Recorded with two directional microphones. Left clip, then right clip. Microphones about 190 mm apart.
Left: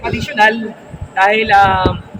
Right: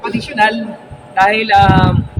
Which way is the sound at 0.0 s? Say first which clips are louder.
Left 1 dB; 5° right (ahead or behind).